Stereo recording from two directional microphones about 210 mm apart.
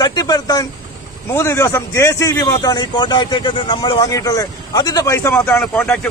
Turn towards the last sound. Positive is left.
turn(degrees=5)  # may be behind; listen again after turning